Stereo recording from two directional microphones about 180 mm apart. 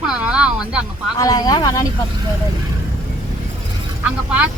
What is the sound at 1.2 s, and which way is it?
Speech, 20° left (ahead or behind).